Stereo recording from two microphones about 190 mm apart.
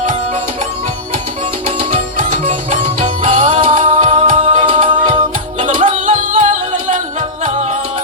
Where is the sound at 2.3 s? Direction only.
40° right (ahead or behind).